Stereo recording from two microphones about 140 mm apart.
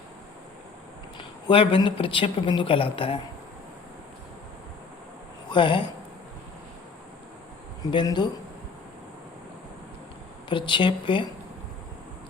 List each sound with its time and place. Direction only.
1.5 s a woman's voice: 40° left (ahead or behind)
5.5 s speech: 35° left (ahead or behind)
7.8 s a woman's voice: 30° left (ahead or behind)
10.5 s a woman's voice: 35° left (ahead or behind)